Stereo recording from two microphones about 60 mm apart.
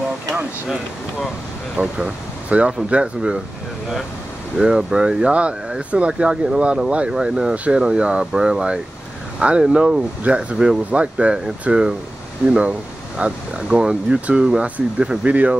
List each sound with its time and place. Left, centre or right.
2.0 s speech: centre
4.6 s speech: centre
7.5 s speech: right